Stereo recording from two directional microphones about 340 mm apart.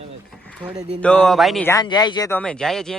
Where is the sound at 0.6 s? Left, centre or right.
Centre.